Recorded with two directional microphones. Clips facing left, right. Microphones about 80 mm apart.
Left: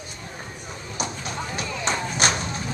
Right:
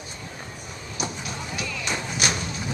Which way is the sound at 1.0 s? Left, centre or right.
Left.